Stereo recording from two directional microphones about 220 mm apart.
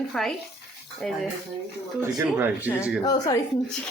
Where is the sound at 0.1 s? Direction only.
Centre (ahead or behind).